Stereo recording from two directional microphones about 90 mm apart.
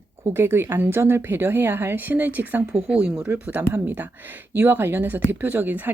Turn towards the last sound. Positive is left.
turn(degrees=-20)  # may be behind; listen again after turning